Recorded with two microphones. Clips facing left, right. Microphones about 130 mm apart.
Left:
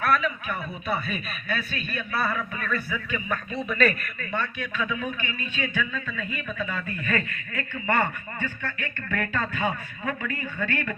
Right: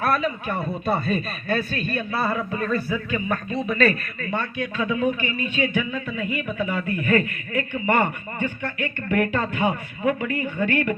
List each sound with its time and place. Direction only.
0.0 s a man's voice: 35° right (ahead or behind)
2.1 s a man's voice: 25° right (ahead or behind)